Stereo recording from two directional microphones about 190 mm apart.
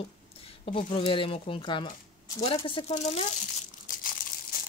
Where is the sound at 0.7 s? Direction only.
45° left (ahead or behind).